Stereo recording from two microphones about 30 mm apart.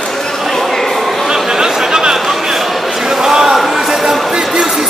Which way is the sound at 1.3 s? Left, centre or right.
Right.